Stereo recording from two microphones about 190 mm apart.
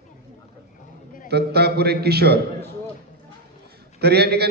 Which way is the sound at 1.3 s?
60° right (ahead or behind).